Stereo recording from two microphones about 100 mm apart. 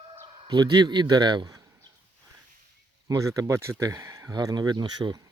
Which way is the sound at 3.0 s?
35° right (ahead or behind).